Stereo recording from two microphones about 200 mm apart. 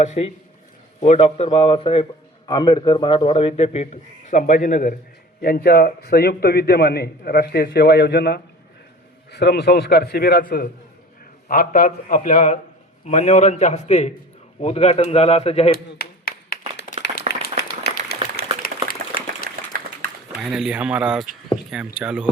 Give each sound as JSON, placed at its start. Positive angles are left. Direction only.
{"t": 0.0, "sound": "a man's voice", "side_deg": 35}
{"t": 16.0, "sound": "clapping", "side_deg": 50}
{"t": 17.3, "sound": "applause", "side_deg": -35}
{"t": 17.6, "sound": "applause", "side_deg": 55}
{"t": 19.7, "sound": "a sound", "side_deg": -45}
{"t": 20.4, "sound": "speech", "side_deg": 0}